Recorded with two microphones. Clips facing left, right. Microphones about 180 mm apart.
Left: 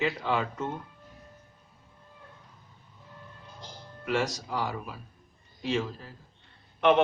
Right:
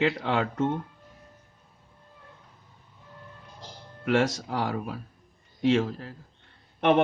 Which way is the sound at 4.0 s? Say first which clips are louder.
Right 5 dB; 60° right (ahead or behind).